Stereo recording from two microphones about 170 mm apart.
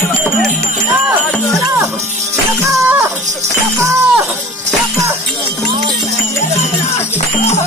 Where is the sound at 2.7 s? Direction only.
15° right (ahead or behind).